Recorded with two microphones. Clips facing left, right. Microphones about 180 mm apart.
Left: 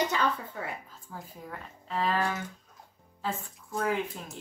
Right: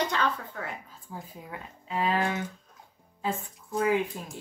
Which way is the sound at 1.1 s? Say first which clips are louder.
Right 1 dB; 10° right (ahead or behind).